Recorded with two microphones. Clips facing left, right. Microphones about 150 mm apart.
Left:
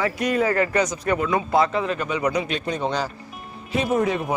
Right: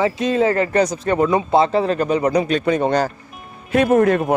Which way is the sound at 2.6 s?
55° right (ahead or behind).